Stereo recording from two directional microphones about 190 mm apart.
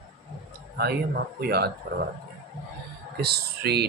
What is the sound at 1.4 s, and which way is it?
Speech, 55° right (ahead or behind).